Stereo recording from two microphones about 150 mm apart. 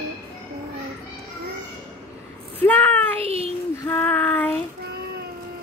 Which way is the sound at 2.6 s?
10° left (ahead or behind).